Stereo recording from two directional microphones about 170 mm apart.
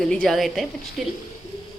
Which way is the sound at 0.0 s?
5° left (ahead or behind).